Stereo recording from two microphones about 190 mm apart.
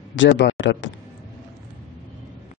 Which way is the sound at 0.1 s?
75° left (ahead or behind).